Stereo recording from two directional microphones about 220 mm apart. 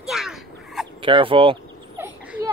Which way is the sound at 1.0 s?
25° right (ahead or behind).